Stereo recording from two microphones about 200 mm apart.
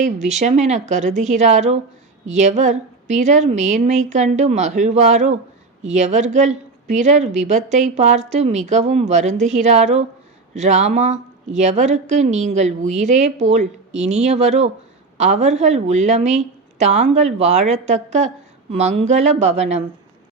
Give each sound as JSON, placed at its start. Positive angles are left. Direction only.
{"t": 0.0, "sound": "a woman's voice", "side_deg": -35}